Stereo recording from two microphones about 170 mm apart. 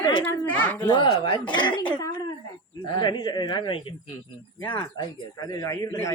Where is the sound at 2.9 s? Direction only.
25° left (ahead or behind).